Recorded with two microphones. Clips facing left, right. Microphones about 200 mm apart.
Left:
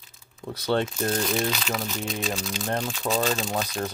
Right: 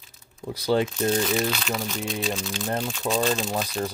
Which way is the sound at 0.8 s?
Centre (ahead or behind).